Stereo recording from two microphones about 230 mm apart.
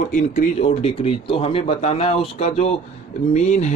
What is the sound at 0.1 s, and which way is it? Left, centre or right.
A man's voice, left.